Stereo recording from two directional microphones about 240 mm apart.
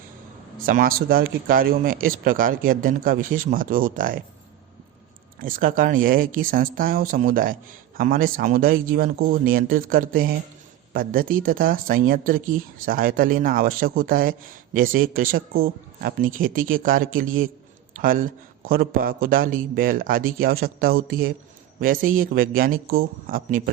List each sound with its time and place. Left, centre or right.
0.6 s speech: right
5.4 s speech: right